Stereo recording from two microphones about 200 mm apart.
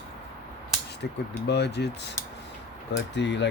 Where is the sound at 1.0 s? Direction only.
50° left (ahead or behind).